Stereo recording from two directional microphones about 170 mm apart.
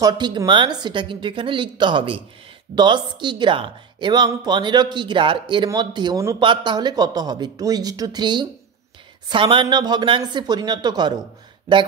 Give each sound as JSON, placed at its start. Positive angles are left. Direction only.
{"t": 0.0, "sound": "a woman's voice", "side_deg": -25}